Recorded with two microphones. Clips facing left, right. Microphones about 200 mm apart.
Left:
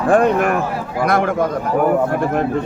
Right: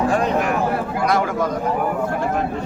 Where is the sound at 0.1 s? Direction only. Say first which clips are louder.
Left 5 dB; 55° left (ahead or behind).